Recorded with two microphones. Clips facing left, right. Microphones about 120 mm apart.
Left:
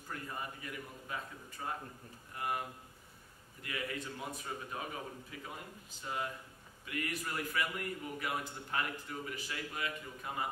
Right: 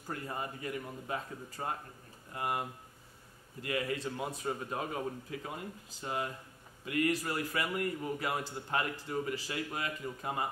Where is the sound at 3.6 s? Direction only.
30° right (ahead or behind).